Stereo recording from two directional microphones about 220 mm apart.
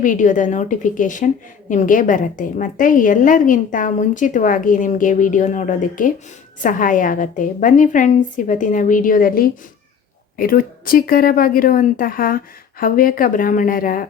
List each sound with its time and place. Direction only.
0.0 s a woman's voice: 35° left (ahead or behind)